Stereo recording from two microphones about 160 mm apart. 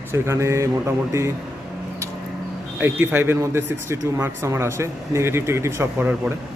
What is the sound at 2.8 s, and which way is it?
A man's voice, 15° right (ahead or behind).